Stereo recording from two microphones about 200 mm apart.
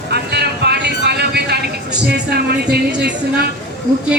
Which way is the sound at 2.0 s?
55° right (ahead or behind).